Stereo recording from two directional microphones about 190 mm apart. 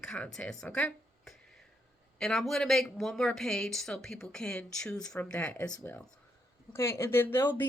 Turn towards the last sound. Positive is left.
turn(degrees=10)  # may be behind; listen again after turning